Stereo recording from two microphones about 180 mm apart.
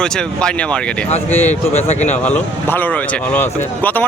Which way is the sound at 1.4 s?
40° left (ahead or behind).